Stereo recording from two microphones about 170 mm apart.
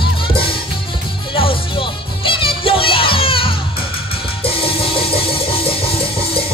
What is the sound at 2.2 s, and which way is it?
Music, 30° left (ahead or behind).